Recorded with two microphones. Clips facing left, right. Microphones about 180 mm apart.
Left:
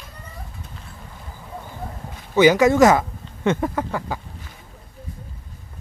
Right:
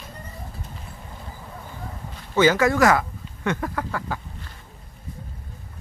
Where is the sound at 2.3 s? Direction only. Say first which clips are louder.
Left 4 dB; 15° left (ahead or behind).